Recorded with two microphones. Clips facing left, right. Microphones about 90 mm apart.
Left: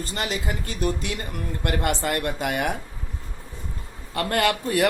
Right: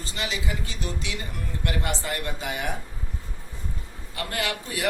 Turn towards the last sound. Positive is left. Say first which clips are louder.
# left 8 dB
turn(degrees=55)  # may be behind; listen again after turning